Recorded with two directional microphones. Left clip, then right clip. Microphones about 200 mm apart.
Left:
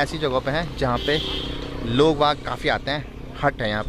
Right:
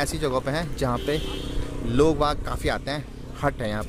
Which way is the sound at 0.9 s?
10° right (ahead or behind).